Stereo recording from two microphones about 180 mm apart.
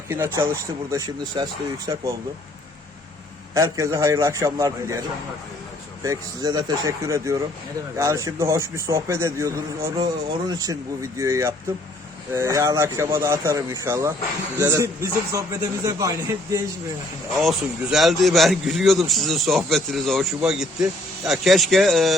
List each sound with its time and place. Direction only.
0.1 s a man's voice: 15° right (ahead or behind)
3.5 s a man's voice: 15° right (ahead or behind)
11.2 s a man's voice: 15° right (ahead or behind)
17.3 s a man's voice: centre (ahead or behind)